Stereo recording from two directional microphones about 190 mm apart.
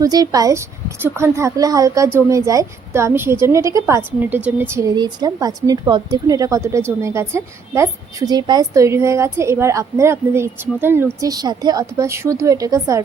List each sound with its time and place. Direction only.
0.0 s a woman's voice: 20° right (ahead or behind)